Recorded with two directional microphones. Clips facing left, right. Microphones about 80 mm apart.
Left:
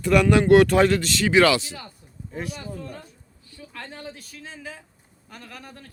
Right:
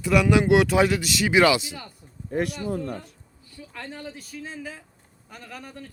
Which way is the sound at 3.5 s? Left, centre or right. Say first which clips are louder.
Even; centre.